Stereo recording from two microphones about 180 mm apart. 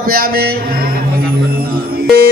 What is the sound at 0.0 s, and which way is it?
Speech, 55° right (ahead or behind).